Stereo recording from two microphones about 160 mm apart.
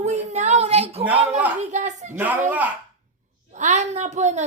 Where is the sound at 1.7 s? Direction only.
45° right (ahead or behind).